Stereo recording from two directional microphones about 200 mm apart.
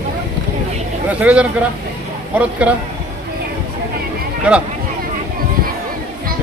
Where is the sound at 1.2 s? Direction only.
5° right (ahead or behind).